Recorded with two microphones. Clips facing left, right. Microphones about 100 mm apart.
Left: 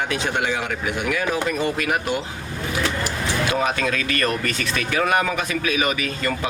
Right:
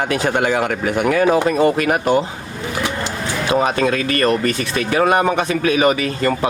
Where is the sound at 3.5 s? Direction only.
35° right (ahead or behind).